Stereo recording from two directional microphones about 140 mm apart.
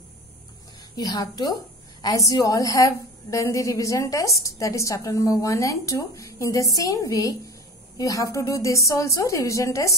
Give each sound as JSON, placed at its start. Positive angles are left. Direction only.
{"t": 0.9, "sound": "a woman's voice", "side_deg": 30}